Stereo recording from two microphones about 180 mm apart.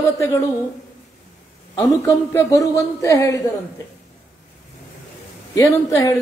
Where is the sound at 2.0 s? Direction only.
15° left (ahead or behind).